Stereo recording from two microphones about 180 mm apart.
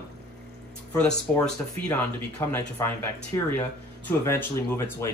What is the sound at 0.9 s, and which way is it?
Speech, 5° left (ahead or behind).